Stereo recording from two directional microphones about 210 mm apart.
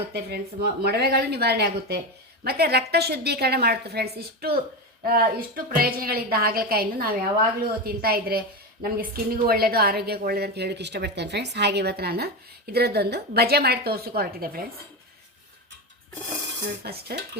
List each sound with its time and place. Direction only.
0.1 s a woman's voice: 50° right (ahead or behind)
16.8 s a woman's voice: 50° right (ahead or behind)